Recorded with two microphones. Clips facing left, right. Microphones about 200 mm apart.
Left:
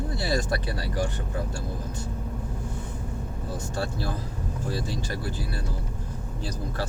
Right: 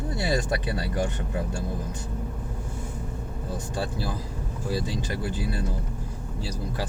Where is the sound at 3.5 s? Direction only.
15° right (ahead or behind).